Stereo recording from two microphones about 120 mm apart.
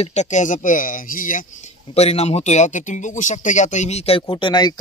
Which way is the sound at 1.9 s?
60° left (ahead or behind).